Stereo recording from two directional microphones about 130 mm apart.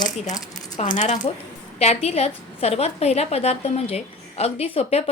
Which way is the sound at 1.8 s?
55° left (ahead or behind).